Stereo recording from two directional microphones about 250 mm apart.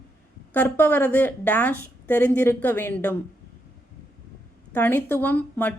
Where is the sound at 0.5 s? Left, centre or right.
Centre.